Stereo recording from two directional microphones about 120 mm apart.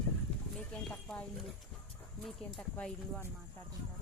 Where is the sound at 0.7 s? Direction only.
5° left (ahead or behind).